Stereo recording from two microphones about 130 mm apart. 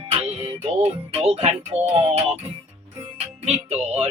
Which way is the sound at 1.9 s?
50° right (ahead or behind).